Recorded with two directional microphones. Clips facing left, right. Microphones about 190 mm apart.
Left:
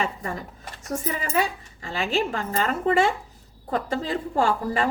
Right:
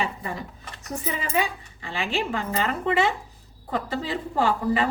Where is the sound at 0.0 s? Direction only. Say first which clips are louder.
Left 1 dB; 45° left (ahead or behind).